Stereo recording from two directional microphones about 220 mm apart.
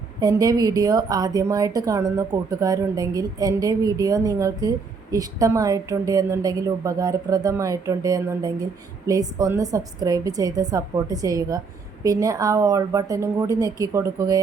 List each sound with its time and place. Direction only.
0.2 s a woman's voice: 15° right (ahead or behind)